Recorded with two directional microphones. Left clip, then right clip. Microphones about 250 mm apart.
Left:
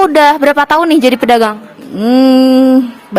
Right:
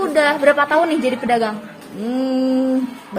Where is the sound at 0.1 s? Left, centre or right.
Left.